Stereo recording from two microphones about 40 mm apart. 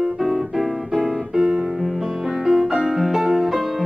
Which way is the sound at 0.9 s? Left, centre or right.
Centre.